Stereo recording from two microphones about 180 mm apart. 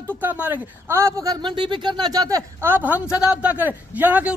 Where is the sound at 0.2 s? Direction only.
10° right (ahead or behind).